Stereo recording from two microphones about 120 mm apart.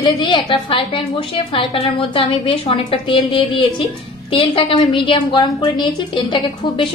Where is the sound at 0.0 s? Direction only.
40° left (ahead or behind).